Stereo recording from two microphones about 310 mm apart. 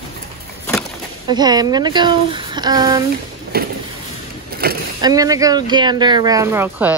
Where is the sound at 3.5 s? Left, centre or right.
Right.